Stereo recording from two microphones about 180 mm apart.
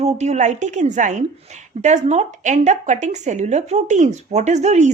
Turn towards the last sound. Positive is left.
turn(degrees=-40)  # may be behind; listen again after turning